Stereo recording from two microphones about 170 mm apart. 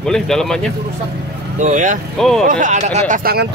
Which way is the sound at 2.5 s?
45° right (ahead or behind).